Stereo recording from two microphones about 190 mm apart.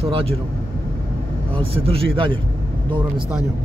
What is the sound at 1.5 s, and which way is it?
Speech, 30° right (ahead or behind).